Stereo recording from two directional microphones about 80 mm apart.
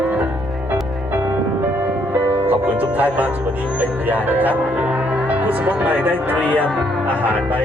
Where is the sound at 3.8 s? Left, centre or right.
Right.